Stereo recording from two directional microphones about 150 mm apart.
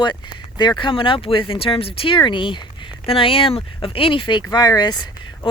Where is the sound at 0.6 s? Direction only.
30° left (ahead or behind).